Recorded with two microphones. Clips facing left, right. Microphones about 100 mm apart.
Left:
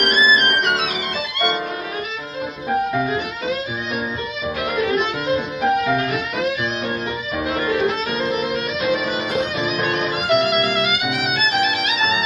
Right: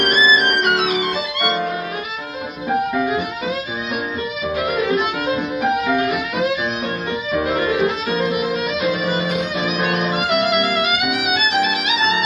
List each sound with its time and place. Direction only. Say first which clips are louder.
0.0 s music: right 1 dB; 15° right (ahead or behind)
4.6 s music: even; centre (ahead or behind)
5.2 s music: even; 15° right (ahead or behind)
7.4 s violin: right 1 dB; centre (ahead or behind)
7.7 s violin: right 1 dB; 10° right (ahead or behind)
9.7 s music: right 1 dB; 15° right (ahead or behind)
10.0 s music: left 3 dB; centre (ahead or behind)